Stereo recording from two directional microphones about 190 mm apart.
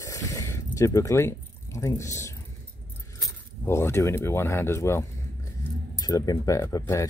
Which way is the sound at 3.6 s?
15° left (ahead or behind).